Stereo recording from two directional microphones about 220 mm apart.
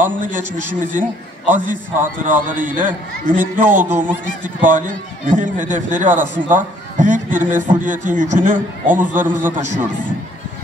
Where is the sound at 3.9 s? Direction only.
10° right (ahead or behind).